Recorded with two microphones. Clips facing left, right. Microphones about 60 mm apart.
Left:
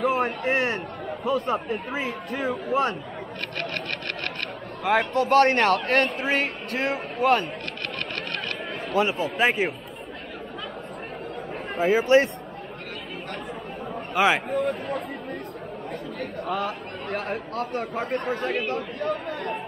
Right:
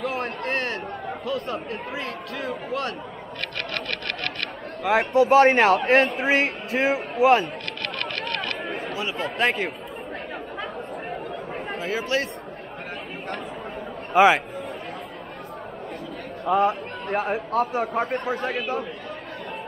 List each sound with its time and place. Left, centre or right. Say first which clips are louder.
0.1 s a man's voice: left 3 dB; centre
4.9 s a man's voice: right 1 dB; centre
5.3 s a man's voice: right 2 dB; centre
9.0 s speech: left 10 dB; left
9.4 s a man's voice: left 1 dB; centre
11.8 s speech: left 8 dB; left
14.2 s speech: right 5 dB; right
14.5 s speech: left 7 dB; left
16.4 s speech: right 9 dB; right
17.2 s a man's voice: right 9 dB; centre